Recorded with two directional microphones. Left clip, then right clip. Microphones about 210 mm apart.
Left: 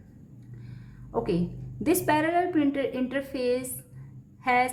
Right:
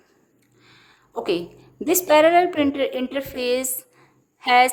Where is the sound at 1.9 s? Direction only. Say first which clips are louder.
Right 9 dB; 40° right (ahead or behind).